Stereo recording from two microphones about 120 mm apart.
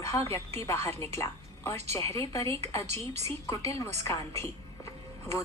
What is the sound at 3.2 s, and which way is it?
Speech, 25° left (ahead or behind).